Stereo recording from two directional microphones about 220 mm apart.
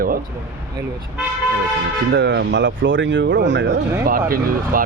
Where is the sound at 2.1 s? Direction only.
50° right (ahead or behind).